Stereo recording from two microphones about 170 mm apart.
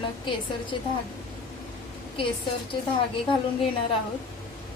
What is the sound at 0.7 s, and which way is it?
Speech, 30° left (ahead or behind).